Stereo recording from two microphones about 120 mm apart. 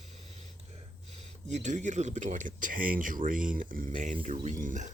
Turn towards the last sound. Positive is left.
turn(degrees=-90)